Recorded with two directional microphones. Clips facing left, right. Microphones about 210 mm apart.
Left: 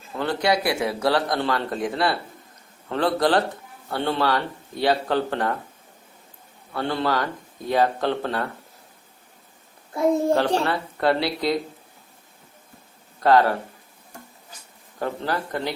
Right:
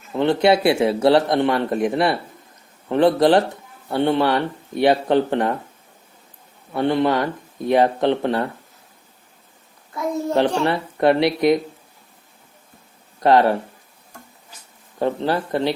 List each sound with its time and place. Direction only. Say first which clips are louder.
0.1 s speech: right 7 dB; 25° right (ahead or behind)
6.7 s speech: right 6 dB; 20° right (ahead or behind)
9.9 s a child's voice: left 4 dB; 30° left (ahead or behind)
10.7 s speech: right 5 dB; 20° right (ahead or behind)
13.1 s speech: right 3 dB; 20° right (ahead or behind)
14.9 s speech: right 6 dB; 20° right (ahead or behind)